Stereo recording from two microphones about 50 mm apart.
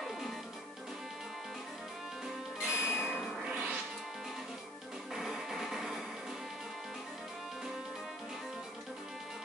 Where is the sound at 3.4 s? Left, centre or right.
Centre.